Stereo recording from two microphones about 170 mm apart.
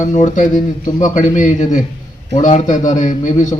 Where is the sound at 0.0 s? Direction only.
45° left (ahead or behind).